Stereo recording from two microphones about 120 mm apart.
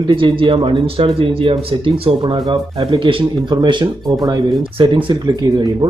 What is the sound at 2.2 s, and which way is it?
Speech, 40° right (ahead or behind).